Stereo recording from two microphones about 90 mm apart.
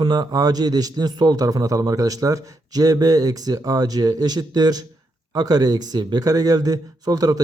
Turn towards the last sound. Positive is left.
turn(degrees=-45)  # may be behind; listen again after turning